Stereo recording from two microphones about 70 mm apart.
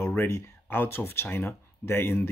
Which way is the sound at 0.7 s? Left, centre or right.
Left.